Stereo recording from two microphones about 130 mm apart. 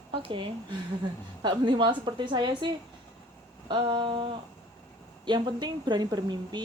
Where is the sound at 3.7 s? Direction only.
35° right (ahead or behind).